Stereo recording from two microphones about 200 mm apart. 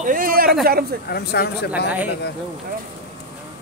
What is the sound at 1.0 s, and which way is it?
Speech, 55° left (ahead or behind).